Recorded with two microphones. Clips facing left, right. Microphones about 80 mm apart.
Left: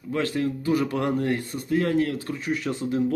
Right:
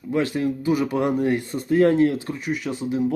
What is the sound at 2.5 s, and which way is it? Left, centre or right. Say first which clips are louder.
Speech: right 1 dB; centre.